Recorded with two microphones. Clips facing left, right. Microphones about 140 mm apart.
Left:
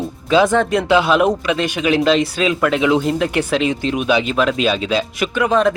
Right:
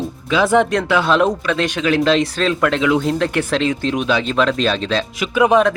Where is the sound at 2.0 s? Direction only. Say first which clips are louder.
Even; 5° left (ahead or behind).